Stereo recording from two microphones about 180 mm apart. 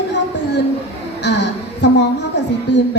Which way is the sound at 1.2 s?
75° left (ahead or behind).